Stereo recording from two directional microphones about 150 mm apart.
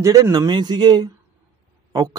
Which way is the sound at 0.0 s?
20° right (ahead or behind).